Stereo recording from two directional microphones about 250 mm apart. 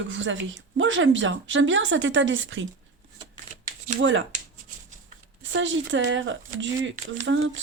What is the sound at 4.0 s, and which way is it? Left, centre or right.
Speech, right.